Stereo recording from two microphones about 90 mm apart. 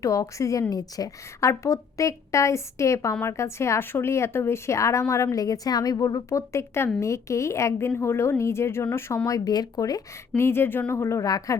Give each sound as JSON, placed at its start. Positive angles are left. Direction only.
{"t": 0.0, "sound": "speech", "side_deg": 40}
{"t": 6.5, "sound": "speech", "side_deg": 30}
{"t": 10.3, "sound": "speech", "side_deg": 25}